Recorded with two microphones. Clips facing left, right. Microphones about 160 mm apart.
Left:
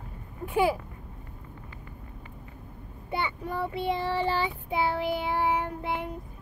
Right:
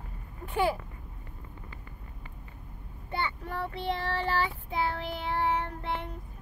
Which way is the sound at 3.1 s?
10° left (ahead or behind).